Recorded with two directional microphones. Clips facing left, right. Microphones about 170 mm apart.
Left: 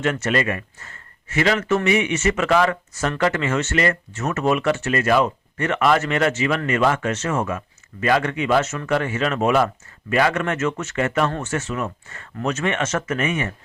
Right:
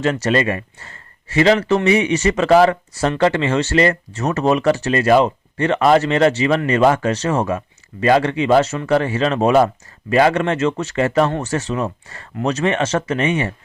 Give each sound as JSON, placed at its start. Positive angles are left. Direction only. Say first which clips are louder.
{"t": 0.0, "sound": "speech", "louder": "right 4 dB", "side_deg": -35}